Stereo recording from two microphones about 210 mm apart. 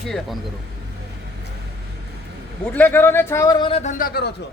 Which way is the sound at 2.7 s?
10° left (ahead or behind).